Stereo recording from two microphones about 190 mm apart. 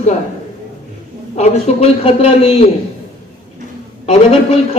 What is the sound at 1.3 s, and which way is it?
A man's voice, 35° left (ahead or behind).